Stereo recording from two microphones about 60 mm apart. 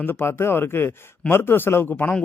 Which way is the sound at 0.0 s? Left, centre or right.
Left.